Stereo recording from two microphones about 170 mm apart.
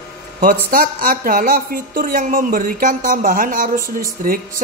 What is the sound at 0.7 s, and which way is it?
A woman's voice, 55° right (ahead or behind).